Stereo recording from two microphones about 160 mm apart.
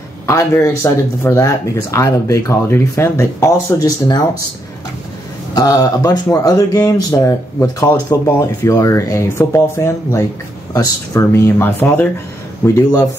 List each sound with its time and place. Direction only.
0.3 s speech: 20° left (ahead or behind)
5.5 s speech: 25° left (ahead or behind)